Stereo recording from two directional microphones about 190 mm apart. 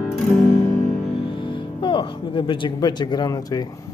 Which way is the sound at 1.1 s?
25° left (ahead or behind).